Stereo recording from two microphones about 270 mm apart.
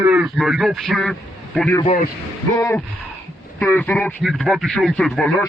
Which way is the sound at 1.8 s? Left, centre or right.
Left.